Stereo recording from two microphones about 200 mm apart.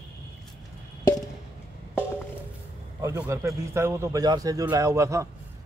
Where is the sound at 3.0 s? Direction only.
15° right (ahead or behind).